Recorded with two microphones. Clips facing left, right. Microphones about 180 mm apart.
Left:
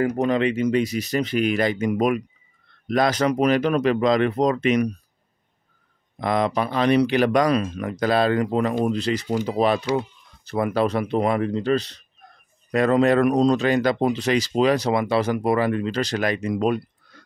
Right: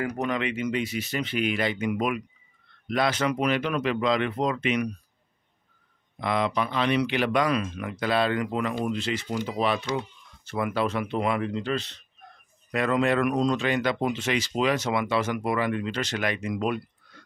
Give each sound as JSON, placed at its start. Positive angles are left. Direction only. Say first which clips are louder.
{"t": 0.0, "sound": "speech", "louder": "left 7 dB", "side_deg": 30}
{"t": 6.1, "sound": "speech", "louder": "left 4 dB", "side_deg": 45}